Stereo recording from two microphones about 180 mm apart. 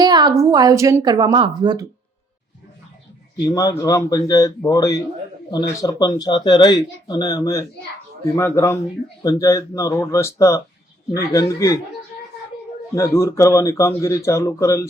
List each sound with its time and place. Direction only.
0.0 s a woman's voice: 25° right (ahead or behind)
3.3 s speech: 20° left (ahead or behind)
12.9 s speech: 15° left (ahead or behind)